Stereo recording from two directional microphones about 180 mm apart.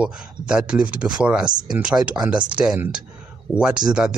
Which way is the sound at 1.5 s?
25° right (ahead or behind).